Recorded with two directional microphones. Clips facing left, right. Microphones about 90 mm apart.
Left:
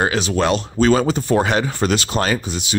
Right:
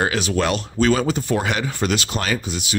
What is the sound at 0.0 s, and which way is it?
Speech, 30° left (ahead or behind).